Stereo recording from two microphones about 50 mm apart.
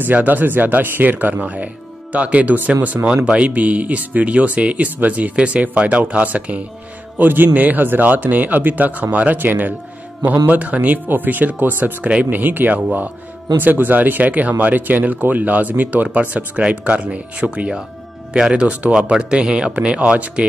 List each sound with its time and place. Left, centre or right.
0.1 s speech: right
7.2 s speech: right
12.4 s speech: right
19.0 s speech: centre